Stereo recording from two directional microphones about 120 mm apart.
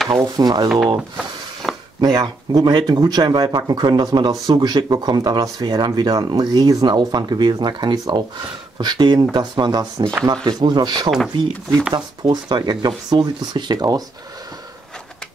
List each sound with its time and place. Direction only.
0.1 s speech: 35° right (ahead or behind)
0.9 s a sound: centre (ahead or behind)
2.0 s speech: 35° right (ahead or behind)